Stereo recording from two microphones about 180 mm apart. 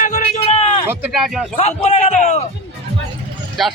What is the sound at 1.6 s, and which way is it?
Speech, 35° left (ahead or behind).